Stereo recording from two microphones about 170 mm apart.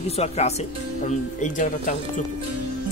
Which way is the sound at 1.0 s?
45° left (ahead or behind).